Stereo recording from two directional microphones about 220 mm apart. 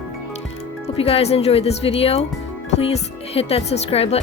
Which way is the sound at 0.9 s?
25° left (ahead or behind).